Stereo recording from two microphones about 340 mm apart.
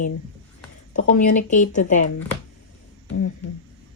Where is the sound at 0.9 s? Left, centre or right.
Left.